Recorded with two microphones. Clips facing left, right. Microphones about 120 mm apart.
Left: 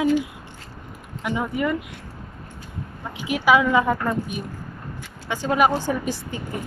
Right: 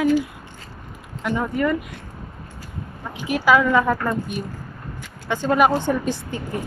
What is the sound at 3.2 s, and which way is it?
A woman's voice, 15° left (ahead or behind).